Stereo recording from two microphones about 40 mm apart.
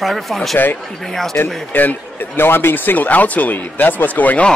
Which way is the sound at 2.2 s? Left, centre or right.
Left.